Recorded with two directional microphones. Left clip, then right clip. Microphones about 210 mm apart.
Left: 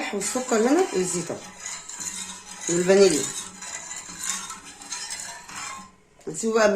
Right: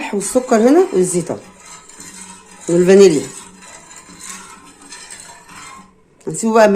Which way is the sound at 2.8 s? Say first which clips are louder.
Right 9 dB; 45° right (ahead or behind).